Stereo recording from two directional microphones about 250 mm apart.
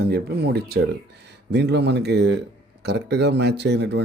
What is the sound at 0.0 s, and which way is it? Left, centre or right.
Speech, right.